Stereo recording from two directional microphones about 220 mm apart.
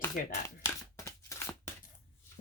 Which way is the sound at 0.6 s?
15° left (ahead or behind).